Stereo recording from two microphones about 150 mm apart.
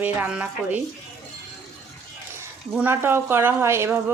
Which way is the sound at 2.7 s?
15° right (ahead or behind).